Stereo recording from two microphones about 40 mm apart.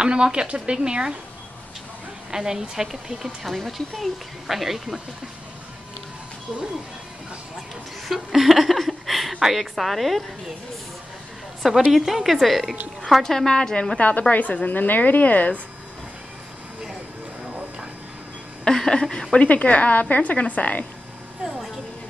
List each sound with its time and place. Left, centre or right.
0.0 s speech: right
2.3 s speech: centre
8.1 s a sound: centre
9.4 s a woman's voice: centre
11.9 s a woman's voice: centre
13.9 s a woman's voice: left
18.6 s a woman's voice: centre
19.4 s a woman's voice: left